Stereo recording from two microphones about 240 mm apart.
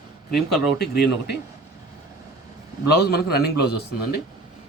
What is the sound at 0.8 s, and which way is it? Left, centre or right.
Speech, left.